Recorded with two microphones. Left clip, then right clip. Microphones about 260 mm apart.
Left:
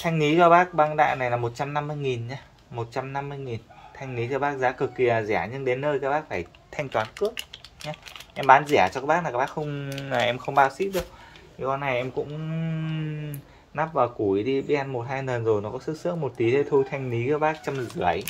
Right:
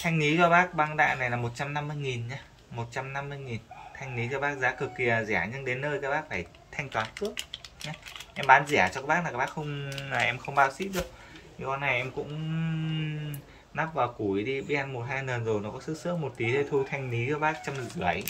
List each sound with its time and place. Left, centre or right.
0.0 s speech: left